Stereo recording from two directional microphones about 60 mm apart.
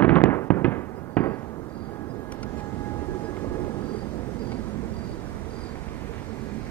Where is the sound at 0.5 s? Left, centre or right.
Left.